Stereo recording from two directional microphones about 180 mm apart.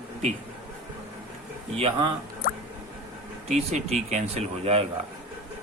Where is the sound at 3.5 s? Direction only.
40° right (ahead or behind).